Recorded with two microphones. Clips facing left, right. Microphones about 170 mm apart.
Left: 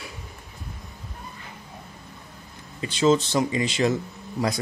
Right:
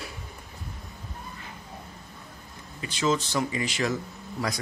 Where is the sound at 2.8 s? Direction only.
25° left (ahead or behind).